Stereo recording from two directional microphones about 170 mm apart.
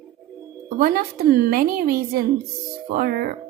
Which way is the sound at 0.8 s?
60° right (ahead or behind).